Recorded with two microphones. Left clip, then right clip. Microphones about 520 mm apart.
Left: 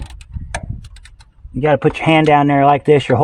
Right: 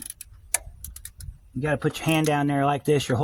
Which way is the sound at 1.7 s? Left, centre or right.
Right.